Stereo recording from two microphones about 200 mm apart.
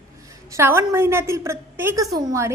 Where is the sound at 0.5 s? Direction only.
15° right (ahead or behind).